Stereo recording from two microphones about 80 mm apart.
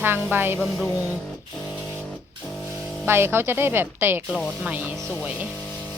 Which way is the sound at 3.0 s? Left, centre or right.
Right.